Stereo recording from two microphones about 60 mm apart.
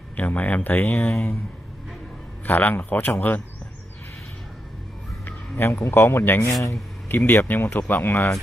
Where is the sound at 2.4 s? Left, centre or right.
Left.